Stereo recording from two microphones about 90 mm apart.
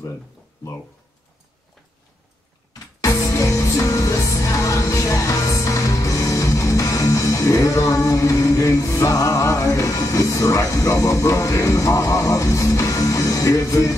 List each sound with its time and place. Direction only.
2.7 s music: 40° left (ahead or behind)